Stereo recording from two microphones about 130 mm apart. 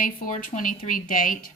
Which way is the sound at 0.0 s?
85° left.